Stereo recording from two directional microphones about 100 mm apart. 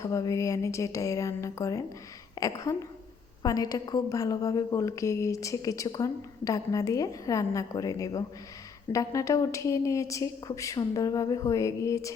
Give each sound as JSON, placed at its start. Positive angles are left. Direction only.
{"t": 0.0, "sound": "a woman's voice", "side_deg": 30}